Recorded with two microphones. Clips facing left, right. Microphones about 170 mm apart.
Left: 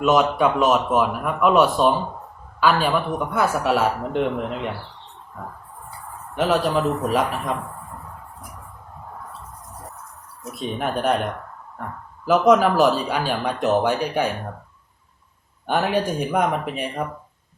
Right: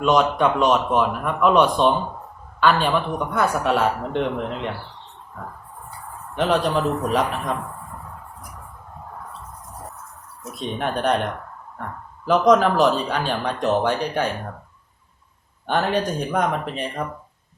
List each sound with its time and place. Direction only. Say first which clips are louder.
0.0 s speech: even; 5° left (ahead or behind)
6.3 s speech: even; 5° left (ahead or behind)
10.5 s speech: even; 5° left (ahead or behind)
15.6 s speech: even; 10° left (ahead or behind)